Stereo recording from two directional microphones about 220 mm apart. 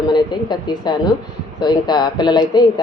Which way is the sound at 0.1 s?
20° left (ahead or behind).